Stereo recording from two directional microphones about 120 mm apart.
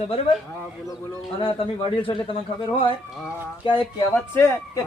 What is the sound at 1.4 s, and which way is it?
Speech, 50° left (ahead or behind).